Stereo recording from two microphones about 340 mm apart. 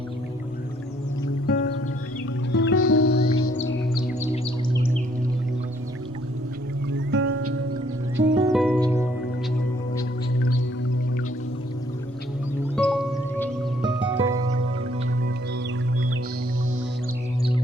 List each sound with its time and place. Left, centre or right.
1.5 s music: left
6.9 s music: right
8.4 s music: centre
12.7 s music: centre